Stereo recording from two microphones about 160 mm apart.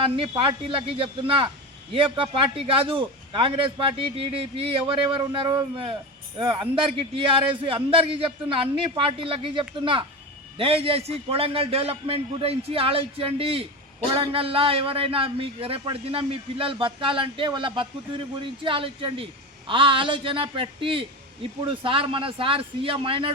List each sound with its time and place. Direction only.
0.0 s a man's voice: 35° right (ahead or behind)